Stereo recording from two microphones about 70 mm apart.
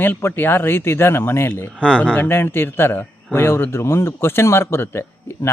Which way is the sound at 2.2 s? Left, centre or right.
Left.